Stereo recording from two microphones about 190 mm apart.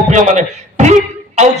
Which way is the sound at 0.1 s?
40° right (ahead or behind).